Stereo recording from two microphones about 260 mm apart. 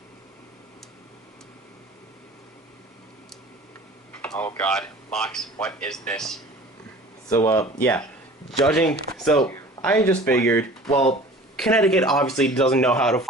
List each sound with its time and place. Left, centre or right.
4.2 s a man's voice: centre
10.9 s speech: left
11.5 s a man's voice: centre